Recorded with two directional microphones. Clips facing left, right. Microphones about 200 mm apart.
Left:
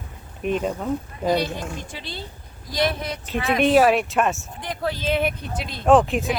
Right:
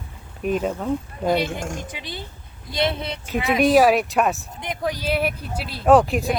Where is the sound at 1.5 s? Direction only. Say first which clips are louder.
Right 2 dB; 45° right (ahead or behind).